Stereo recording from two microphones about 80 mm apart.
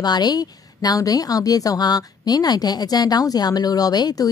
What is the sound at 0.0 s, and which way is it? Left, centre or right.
A woman's voice, left.